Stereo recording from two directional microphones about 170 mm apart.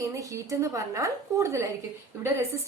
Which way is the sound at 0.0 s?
20° right (ahead or behind).